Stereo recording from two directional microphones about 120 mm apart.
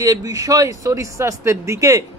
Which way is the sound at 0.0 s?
30° right (ahead or behind).